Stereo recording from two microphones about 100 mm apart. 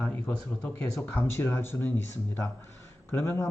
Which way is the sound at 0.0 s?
20° left (ahead or behind).